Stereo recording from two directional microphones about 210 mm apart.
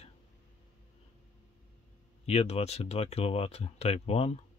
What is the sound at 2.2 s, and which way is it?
Speech, 30° left (ahead or behind).